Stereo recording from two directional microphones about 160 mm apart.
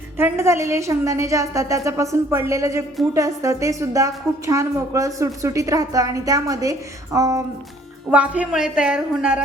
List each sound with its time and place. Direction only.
0.2 s a woman's voice: 15° right (ahead or behind)
8.1 s a woman's voice: 10° right (ahead or behind)